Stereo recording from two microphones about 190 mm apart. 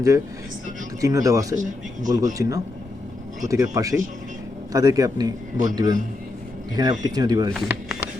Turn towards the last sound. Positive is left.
turn(degrees=0)  # may be behind; listen again after turning